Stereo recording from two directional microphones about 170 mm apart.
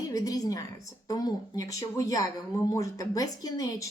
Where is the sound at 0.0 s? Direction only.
20° left (ahead or behind).